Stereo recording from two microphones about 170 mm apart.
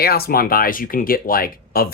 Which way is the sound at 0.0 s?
65° left (ahead or behind).